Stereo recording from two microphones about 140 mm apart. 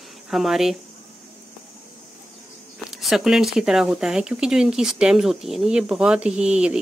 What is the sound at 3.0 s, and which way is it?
Speech, centre (ahead or behind).